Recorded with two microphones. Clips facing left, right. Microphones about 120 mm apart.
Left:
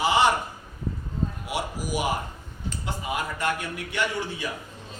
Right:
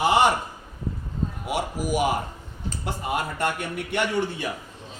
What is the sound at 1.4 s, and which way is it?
Speech, 50° right (ahead or behind).